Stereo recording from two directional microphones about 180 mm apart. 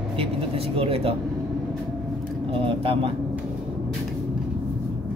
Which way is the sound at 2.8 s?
30° right (ahead or behind).